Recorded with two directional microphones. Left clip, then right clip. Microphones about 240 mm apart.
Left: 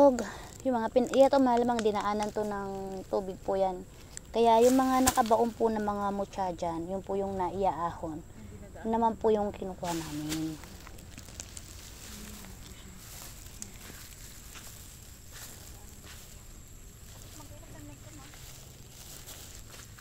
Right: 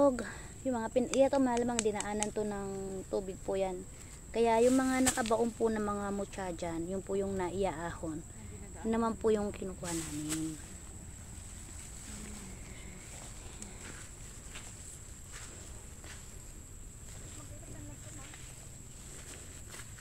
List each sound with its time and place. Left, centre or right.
0.0 s speech: left; by 9.7 s centre